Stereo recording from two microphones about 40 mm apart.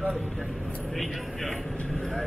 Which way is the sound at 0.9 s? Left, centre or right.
Centre.